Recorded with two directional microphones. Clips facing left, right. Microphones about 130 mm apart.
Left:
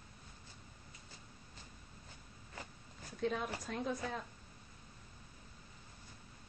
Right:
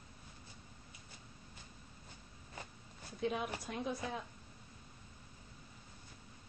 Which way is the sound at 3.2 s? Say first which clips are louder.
Even; 10° right (ahead or behind).